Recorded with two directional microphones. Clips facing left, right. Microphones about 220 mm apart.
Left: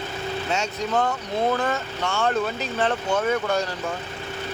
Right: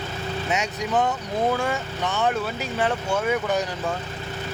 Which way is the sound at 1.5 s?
10° right (ahead or behind).